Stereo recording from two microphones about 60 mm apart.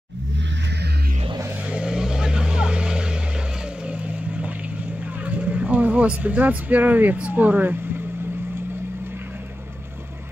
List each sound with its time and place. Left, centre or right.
1.7 s vehicle: centre; by 7.2 s right
7.2 s speech: right